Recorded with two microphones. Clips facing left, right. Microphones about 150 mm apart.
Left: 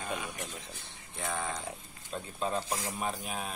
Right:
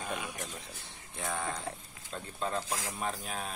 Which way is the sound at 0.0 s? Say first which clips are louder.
Left 1 dB; 5° right (ahead or behind).